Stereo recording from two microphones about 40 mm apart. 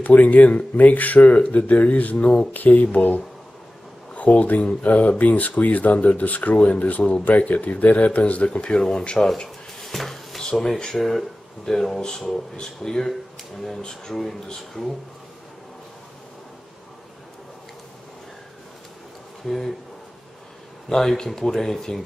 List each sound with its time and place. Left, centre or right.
0.0 s speech: left
2.1 s speech: left
2.5 s speech: left
7.2 s speech: left
8.5 s speech: left
9.8 s cupboard open or close: centre
10.4 s speech: centre
19.4 s speech: centre
20.9 s speech: centre